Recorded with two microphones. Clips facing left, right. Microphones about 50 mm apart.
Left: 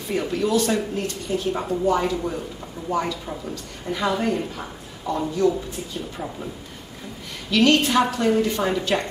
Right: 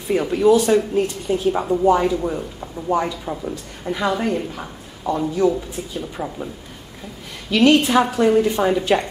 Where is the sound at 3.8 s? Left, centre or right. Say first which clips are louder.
Right 2 dB; centre.